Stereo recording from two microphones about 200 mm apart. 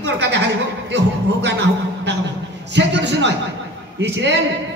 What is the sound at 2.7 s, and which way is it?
A man's voice, 60° right (ahead or behind).